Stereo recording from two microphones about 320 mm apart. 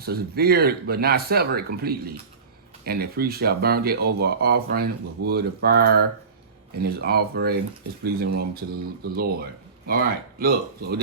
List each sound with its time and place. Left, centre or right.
0.0 s speech: right